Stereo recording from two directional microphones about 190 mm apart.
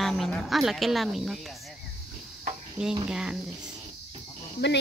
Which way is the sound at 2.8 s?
5° right (ahead or behind).